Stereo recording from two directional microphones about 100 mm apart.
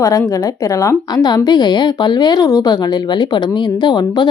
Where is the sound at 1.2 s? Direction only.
40° left (ahead or behind).